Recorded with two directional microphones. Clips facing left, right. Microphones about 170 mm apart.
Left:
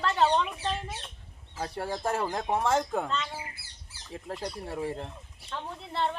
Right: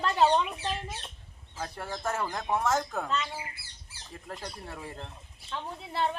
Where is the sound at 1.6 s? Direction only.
35° left (ahead or behind).